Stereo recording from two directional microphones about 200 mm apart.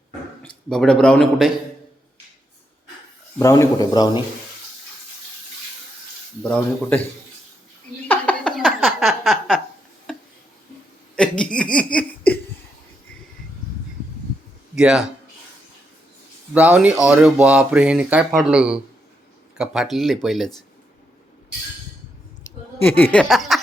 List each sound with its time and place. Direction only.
0.4 s speech: 5° left (ahead or behind)
3.3 s a man's voice: 15° left (ahead or behind)
6.4 s a man's voice: 5° left (ahead or behind)
8.0 s a sound: 5° left (ahead or behind)
11.2 s speech: 5° left (ahead or behind)
14.8 s speech: 5° right (ahead or behind)
16.6 s speech: 5° right (ahead or behind)
22.8 s a man's voice: 10° left (ahead or behind)